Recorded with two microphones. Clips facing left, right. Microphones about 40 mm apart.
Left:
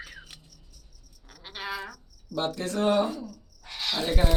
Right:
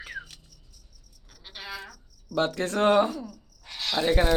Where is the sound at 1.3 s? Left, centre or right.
Centre.